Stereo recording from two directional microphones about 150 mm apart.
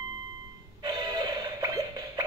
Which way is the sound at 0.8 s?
30° right (ahead or behind).